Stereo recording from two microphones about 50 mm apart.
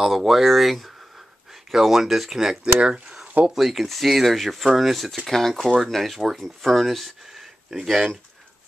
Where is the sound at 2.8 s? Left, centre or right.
Centre.